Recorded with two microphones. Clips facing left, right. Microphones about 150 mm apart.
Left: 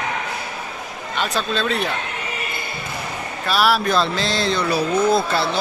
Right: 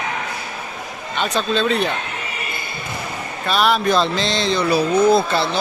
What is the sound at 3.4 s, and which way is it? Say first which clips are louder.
Speech: right 1 dB; 5° left (ahead or behind).